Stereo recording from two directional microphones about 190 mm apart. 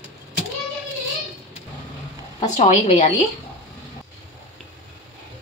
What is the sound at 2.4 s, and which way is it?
Speech, 40° left (ahead or behind).